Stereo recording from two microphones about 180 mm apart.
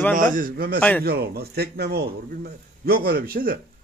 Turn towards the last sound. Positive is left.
turn(degrees=-55)  # may be behind; listen again after turning